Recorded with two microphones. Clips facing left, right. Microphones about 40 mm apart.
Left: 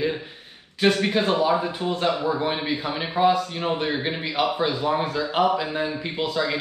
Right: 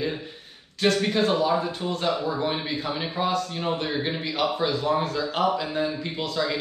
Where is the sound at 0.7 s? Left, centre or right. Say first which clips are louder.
Left 2 dB; centre.